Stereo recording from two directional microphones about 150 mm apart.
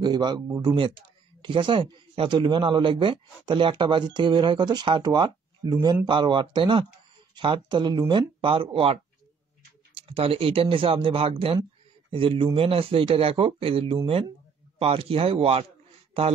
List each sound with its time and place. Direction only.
0.0 s a man's voice: 30° right (ahead or behind)